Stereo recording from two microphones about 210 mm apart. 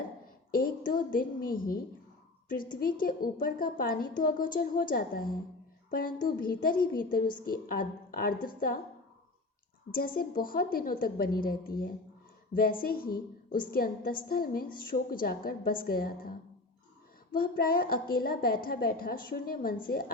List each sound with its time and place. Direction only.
0.5 s a woman's voice: 40° left (ahead or behind)
10.2 s a woman's voice: 45° left (ahead or behind)
17.3 s a woman's voice: 45° left (ahead or behind)